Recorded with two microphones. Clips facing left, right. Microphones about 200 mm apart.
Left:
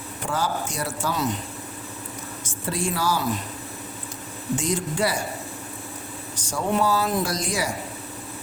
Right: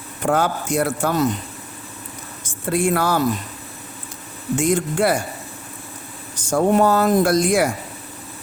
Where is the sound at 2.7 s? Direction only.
60° right (ahead or behind).